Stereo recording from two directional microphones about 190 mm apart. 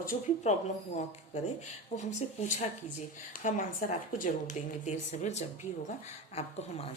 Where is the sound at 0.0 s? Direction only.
40° left (ahead or behind).